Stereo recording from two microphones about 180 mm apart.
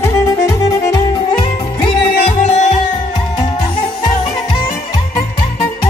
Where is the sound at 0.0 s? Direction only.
15° left (ahead or behind); by 2.7 s 35° left (ahead or behind).